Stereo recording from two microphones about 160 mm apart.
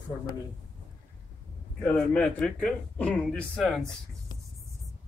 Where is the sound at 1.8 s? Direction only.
10° left (ahead or behind).